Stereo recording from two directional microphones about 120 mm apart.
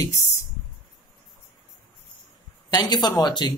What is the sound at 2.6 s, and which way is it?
Speech, 35° left (ahead or behind).